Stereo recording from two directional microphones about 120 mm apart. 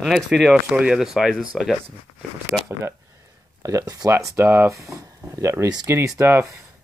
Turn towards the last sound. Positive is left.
turn(degrees=-20)  # may be behind; listen again after turning